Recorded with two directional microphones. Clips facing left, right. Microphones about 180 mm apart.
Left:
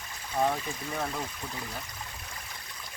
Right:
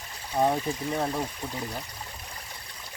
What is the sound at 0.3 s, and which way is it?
Speech, 25° right (ahead or behind).